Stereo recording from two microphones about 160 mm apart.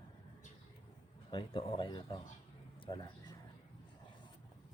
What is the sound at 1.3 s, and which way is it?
Speech, 30° left (ahead or behind).